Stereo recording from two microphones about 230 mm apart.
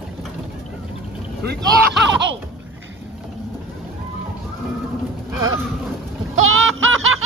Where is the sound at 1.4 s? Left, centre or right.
Right.